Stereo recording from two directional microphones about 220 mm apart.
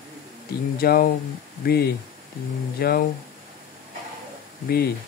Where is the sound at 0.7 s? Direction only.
45° left (ahead or behind).